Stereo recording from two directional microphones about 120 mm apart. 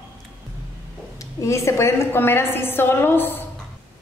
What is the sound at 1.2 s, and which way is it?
A woman's voice, 25° left (ahead or behind).